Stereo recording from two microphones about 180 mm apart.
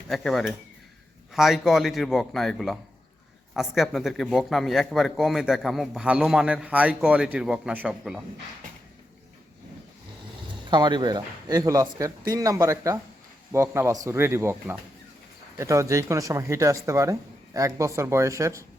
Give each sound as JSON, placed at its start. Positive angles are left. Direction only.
{"t": 0.1, "sound": "a man's voice", "side_deg": 0}
{"t": 10.7, "sound": "speech", "side_deg": -25}